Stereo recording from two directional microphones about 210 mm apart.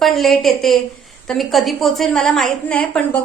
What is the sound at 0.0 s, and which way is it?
A woman's voice, centre (ahead or behind).